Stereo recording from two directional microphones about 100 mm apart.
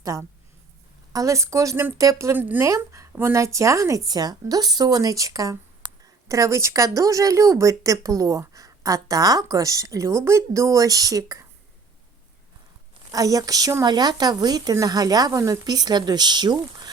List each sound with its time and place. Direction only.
0.0 s speech: 35° right (ahead or behind)
2.3 s a woman's voice: 20° right (ahead or behind)
2.6 s speech: 30° right (ahead or behind)
13.1 s speech: 35° right (ahead or behind)